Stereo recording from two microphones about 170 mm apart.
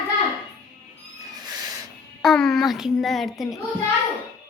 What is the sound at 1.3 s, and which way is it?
Cat, 20° right (ahead or behind).